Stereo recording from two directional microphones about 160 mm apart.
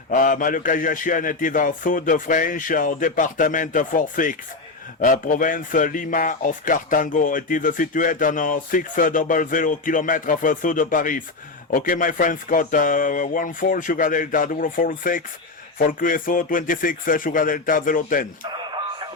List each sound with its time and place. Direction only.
0.1 s speech: 55° left (ahead or behind)